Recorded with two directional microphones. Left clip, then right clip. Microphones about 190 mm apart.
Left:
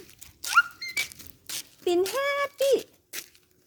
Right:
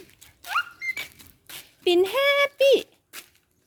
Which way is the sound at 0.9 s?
55° left (ahead or behind).